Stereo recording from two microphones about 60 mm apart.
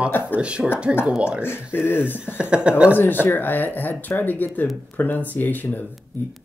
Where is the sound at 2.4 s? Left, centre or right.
Centre.